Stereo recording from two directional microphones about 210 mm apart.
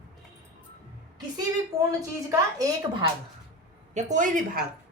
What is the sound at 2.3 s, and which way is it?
Speech, 15° right (ahead or behind).